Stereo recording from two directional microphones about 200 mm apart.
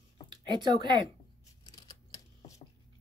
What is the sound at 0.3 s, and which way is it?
Speech, 20° right (ahead or behind).